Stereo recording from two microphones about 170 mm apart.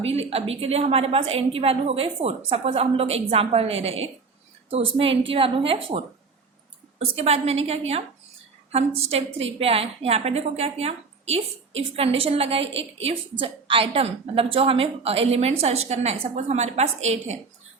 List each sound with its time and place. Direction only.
0.0 s a woman's voice: 35° right (ahead or behind)
7.0 s a woman's voice: 35° right (ahead or behind)